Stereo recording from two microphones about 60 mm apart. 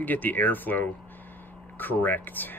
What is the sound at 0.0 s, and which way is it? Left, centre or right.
Speech, left.